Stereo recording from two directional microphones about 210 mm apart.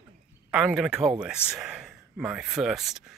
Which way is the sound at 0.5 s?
Centre (ahead or behind).